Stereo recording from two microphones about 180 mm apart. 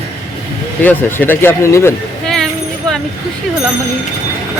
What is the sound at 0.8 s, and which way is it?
Speech, 10° left (ahead or behind).